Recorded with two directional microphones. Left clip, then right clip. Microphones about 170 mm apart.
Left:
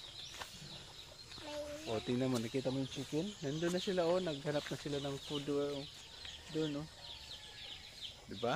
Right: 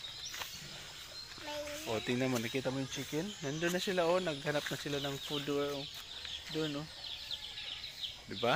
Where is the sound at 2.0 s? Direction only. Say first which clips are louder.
Right 3 dB; centre (ahead or behind).